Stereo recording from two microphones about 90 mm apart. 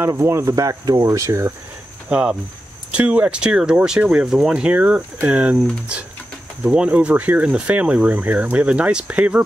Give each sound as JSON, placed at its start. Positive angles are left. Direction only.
{"t": 0.0, "sound": "speech", "side_deg": -30}
{"t": 2.0, "sound": "speech", "side_deg": -15}